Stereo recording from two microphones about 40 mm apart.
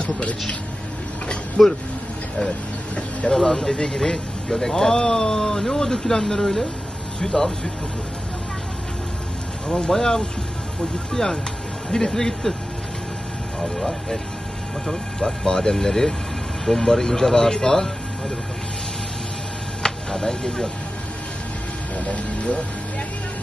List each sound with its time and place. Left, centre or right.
0.0 s a sound: left
1.6 s speech: left
3.3 s speech: centre
9.7 s speech: left
13.6 s speech: centre
19.8 s speech: centre
21.9 s speech: left